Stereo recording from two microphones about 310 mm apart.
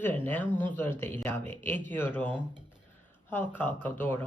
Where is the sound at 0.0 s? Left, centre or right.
Centre.